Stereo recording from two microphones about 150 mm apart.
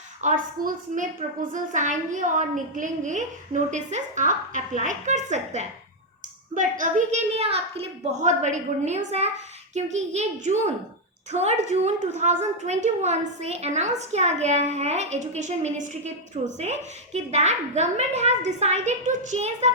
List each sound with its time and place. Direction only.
0.2 s a woman's voice: 55° right (ahead or behind)